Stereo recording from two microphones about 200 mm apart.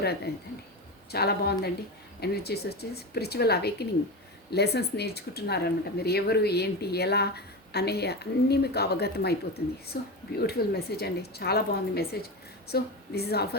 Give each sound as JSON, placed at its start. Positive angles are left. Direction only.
{"t": 0.3, "sound": "speech", "side_deg": 55}